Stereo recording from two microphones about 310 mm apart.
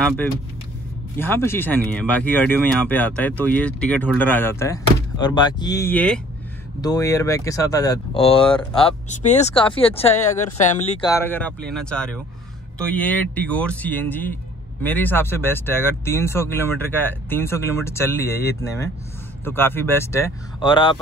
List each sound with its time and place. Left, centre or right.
1.1 s speech: centre; by 11.1 s left
11.1 s speech: centre